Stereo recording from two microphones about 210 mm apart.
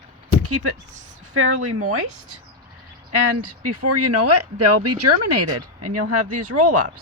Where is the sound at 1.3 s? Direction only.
90° right.